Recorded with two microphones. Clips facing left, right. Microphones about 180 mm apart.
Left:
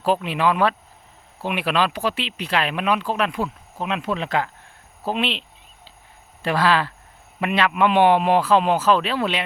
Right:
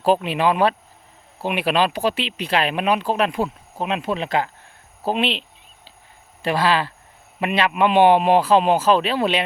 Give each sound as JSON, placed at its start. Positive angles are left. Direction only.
{"t": 0.0, "sound": "speech", "side_deg": -25}